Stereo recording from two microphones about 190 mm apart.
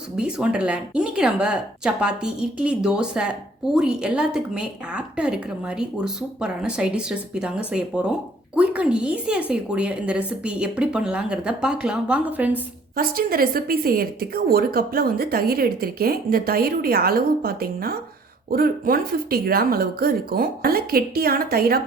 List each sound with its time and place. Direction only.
0.2 s speech: 5° right (ahead or behind)
13.0 s a woman's voice: 50° right (ahead or behind)